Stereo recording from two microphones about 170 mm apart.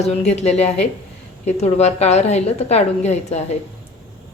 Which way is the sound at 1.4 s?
40° left (ahead or behind).